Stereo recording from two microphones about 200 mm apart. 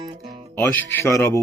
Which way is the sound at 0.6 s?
10° left (ahead or behind).